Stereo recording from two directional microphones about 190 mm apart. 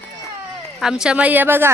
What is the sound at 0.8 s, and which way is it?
Speech, 5° right (ahead or behind).